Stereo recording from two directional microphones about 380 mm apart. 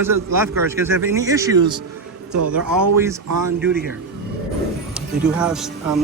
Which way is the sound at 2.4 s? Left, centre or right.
Right.